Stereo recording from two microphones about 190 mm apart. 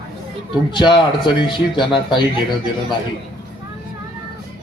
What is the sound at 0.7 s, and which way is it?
A man's voice, 25° left (ahead or behind).